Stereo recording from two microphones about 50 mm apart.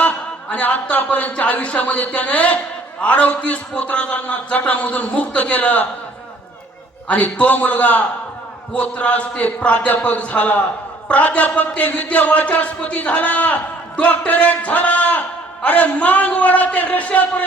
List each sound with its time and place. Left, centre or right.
0.6 s a man's voice: left
7.1 s a man's voice: left